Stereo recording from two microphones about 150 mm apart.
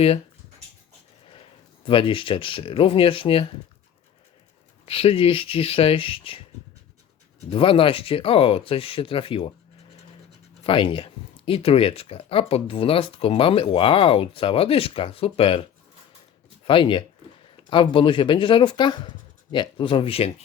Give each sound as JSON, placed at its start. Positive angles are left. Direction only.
{"t": 1.8, "sound": "speech", "side_deg": 35}
{"t": 4.9, "sound": "speech", "side_deg": 40}
{"t": 7.5, "sound": "speech", "side_deg": 35}
{"t": 10.6, "sound": "speech", "side_deg": 35}
{"t": 16.6, "sound": "speech", "side_deg": 35}